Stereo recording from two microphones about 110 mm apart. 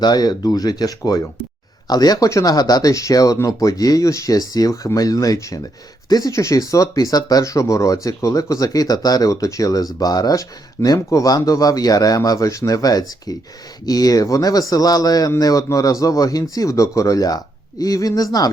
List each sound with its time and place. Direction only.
0.0 s speech: 40° left (ahead or behind)